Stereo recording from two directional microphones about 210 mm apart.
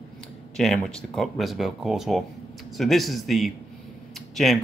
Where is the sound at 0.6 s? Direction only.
5° left (ahead or behind).